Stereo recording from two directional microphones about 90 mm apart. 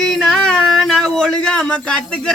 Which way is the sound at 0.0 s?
Centre (ahead or behind).